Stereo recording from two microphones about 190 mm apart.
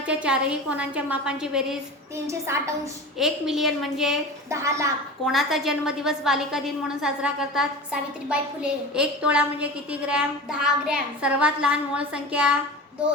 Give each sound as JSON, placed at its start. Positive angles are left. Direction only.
{"t": 0.0, "sound": "a woman's voice", "side_deg": -5}
{"t": 2.1, "sound": "a woman's voice", "side_deg": -15}
{"t": 3.2, "sound": "a woman's voice", "side_deg": 0}
{"t": 4.4, "sound": "a woman's voice", "side_deg": -15}
{"t": 5.2, "sound": "a woman's voice", "side_deg": 0}